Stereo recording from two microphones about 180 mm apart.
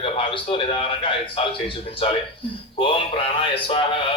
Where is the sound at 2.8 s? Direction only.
30° left (ahead or behind).